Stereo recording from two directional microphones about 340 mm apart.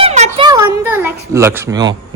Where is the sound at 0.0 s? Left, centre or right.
Centre.